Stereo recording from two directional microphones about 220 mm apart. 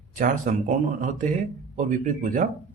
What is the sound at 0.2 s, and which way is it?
Speech, 35° right (ahead or behind).